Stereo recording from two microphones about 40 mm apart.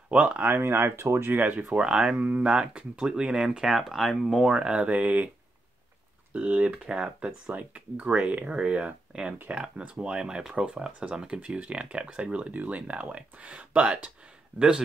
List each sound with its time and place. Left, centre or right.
0.1 s speech: right
0.5 s speech: right
1.3 s speech: right
1.8 s speech: right
2.1 s speech: right
3.6 s speech: centre
4.6 s speech: right
6.3 s speech: right
6.8 s speech: right